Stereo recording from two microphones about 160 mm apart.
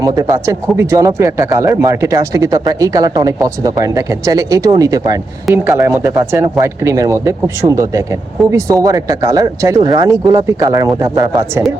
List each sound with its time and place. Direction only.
0.0 s speech: 20° right (ahead or behind)